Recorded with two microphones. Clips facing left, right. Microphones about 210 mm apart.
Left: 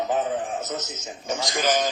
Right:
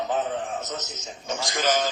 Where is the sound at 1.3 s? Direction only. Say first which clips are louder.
Left 1 dB; 15° left (ahead or behind).